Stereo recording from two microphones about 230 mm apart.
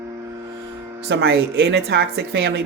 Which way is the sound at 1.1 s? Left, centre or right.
Right.